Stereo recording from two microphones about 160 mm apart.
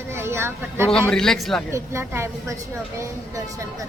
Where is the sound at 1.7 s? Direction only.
15° right (ahead or behind).